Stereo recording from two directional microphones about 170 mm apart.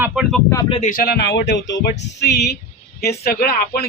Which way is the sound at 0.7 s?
45° left (ahead or behind).